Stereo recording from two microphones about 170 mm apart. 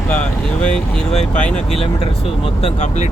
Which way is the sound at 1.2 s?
45° left (ahead or behind).